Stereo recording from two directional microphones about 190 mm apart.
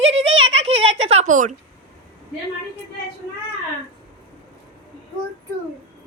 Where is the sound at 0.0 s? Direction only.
30° right (ahead or behind).